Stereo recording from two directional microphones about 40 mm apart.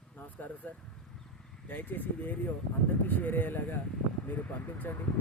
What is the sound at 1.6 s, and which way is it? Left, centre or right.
Speech, left.